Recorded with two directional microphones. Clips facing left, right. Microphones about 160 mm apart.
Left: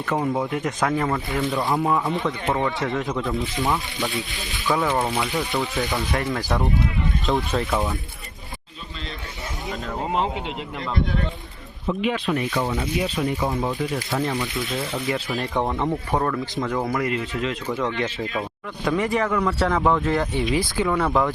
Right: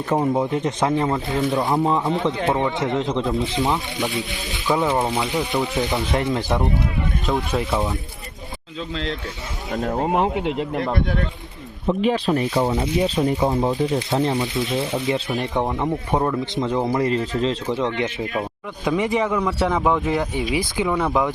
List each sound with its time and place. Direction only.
0.0 s speech: 25° right (ahead or behind)
7.3 s speech: centre (ahead or behind)
9.7 s speech: 45° right (ahead or behind)
10.2 s speech: 60° right (ahead or behind)
11.9 s speech: 35° right (ahead or behind); by 21.3 s 15° right (ahead or behind)